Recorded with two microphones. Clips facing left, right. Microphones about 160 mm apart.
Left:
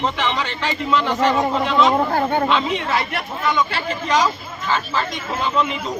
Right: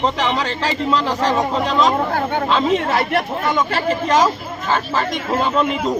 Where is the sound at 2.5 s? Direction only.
45° right (ahead or behind).